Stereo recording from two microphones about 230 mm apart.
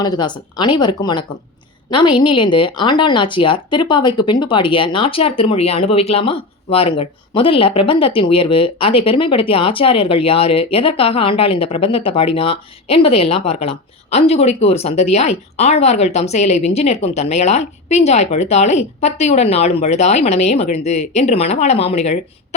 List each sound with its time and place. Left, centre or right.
0.0 s speech: centre